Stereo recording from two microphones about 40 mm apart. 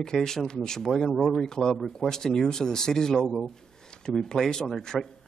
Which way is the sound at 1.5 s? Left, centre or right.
Centre.